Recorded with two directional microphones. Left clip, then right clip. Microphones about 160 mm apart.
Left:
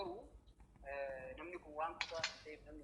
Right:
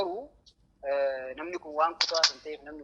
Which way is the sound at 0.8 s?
50° right (ahead or behind).